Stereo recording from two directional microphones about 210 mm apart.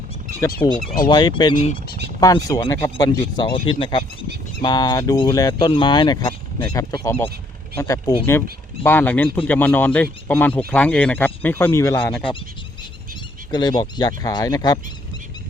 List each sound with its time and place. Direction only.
0.6 s speech: 20° left (ahead or behind)
13.5 s speech: 20° left (ahead or behind)